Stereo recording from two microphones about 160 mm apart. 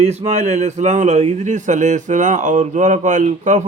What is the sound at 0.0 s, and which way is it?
Speech, 40° right (ahead or behind).